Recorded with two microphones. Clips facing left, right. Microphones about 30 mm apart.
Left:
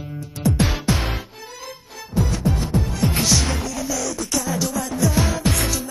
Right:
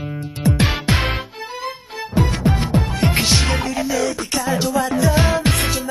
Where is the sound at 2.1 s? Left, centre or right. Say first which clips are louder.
Right 3 dB; right.